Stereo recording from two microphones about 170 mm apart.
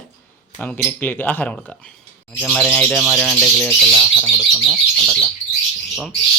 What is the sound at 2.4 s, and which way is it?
Bird, 5° left (ahead or behind).